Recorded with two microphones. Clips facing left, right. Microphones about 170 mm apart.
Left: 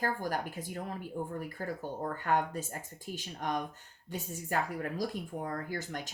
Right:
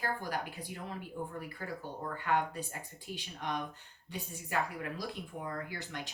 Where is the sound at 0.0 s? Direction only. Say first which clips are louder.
Left 3 dB; 45° left (ahead or behind).